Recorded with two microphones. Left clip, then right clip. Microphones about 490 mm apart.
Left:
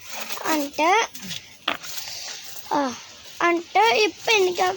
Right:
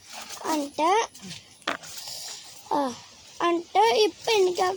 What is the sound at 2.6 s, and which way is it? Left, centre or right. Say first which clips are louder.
Speech: left 3 dB; right.